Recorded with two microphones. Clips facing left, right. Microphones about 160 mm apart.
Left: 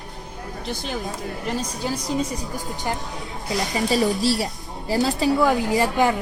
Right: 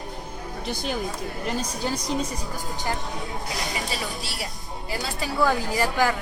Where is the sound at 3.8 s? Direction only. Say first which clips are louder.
Left 11 dB; centre (ahead or behind).